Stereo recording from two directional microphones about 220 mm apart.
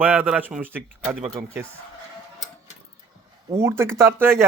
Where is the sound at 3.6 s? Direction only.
10° right (ahead or behind).